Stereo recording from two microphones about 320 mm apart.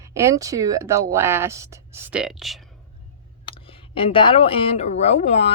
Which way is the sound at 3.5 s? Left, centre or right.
Centre.